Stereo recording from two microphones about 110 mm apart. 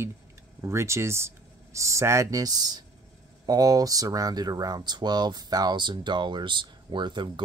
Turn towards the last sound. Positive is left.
turn(degrees=-45)  # may be behind; listen again after turning